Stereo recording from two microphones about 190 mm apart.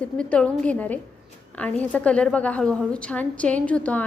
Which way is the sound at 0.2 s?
5° left (ahead or behind).